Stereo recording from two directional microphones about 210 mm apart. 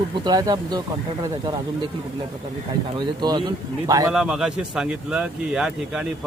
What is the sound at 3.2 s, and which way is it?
Speech, 20° right (ahead or behind).